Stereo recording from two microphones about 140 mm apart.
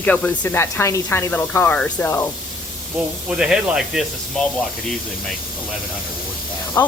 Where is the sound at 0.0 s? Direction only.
10° left (ahead or behind).